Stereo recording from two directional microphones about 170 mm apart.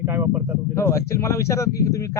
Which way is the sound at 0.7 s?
15° left (ahead or behind).